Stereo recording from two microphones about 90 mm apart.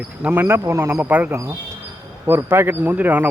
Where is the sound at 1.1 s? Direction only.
15° right (ahead or behind).